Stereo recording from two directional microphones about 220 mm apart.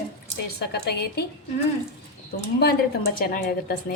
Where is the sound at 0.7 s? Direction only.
45° left (ahead or behind).